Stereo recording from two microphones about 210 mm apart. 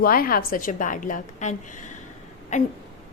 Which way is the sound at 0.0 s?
45° left (ahead or behind).